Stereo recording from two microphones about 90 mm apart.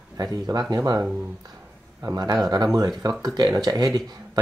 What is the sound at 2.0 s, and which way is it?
Speech, 45° right (ahead or behind).